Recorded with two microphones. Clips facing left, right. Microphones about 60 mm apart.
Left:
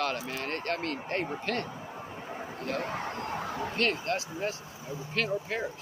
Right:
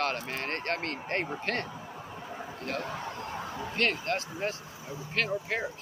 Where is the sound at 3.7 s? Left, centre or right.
Right.